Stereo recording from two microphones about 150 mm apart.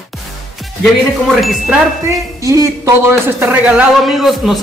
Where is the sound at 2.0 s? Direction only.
20° right (ahead or behind).